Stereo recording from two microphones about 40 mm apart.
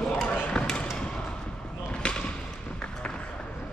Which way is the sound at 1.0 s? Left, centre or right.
Left.